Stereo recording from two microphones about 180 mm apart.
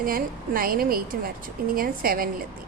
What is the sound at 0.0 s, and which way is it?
A woman's voice, 55° right (ahead or behind).